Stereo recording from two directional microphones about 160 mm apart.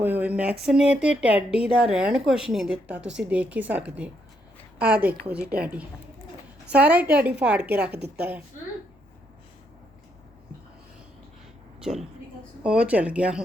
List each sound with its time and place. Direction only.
0.0 s a woman's voice: 10° right (ahead or behind)
4.8 s a woman's voice: 75° right (ahead or behind)
5.3 s a woman's voice: 5° right (ahead or behind)
7.9 s a woman's voice: 90° right
11.8 s a woman's voice: 5° right (ahead or behind)